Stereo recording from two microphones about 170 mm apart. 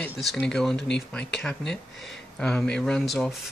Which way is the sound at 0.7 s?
85° left.